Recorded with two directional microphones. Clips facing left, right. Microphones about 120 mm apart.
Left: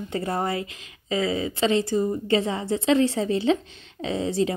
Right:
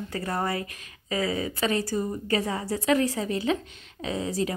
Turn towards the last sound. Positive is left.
turn(degrees=30)  # may be behind; listen again after turning